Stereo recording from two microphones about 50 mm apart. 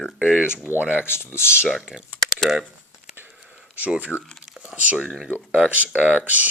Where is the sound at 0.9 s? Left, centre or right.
Left.